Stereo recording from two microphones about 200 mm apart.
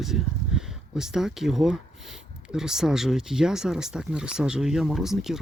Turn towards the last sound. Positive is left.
turn(degrees=0)  # may be behind; listen again after turning